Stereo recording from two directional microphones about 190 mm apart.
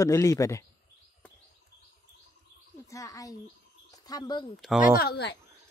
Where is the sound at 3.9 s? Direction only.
20° left (ahead or behind).